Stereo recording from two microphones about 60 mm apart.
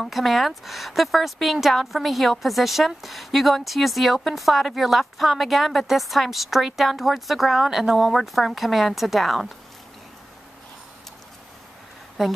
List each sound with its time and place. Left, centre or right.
0.0 s a woman's voice: centre
12.2 s a woman's voice: centre